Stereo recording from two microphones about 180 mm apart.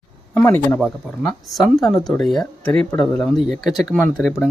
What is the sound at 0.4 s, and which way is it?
Speech, 10° left (ahead or behind).